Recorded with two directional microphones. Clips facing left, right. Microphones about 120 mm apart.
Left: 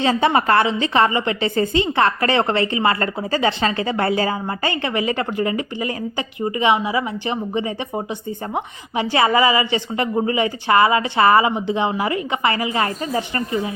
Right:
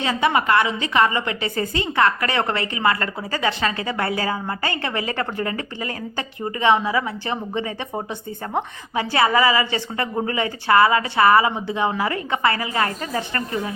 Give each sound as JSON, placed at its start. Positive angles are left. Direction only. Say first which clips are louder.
{"t": 0.0, "sound": "a woman's voice", "louder": "left 3 dB", "side_deg": 30}